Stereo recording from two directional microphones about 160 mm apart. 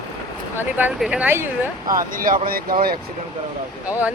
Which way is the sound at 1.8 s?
60° right (ahead or behind).